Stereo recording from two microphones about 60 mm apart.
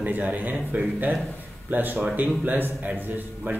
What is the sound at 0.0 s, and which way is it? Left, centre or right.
A man's voice, right.